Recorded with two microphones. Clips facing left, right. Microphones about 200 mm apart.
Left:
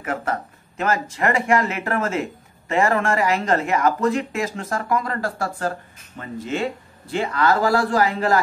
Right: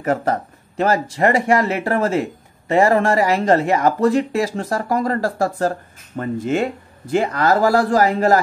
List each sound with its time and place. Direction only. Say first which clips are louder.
0.0 s speech: right 6 dB; 40° right (ahead or behind)
6.1 s speech: right 7 dB; 50° right (ahead or behind)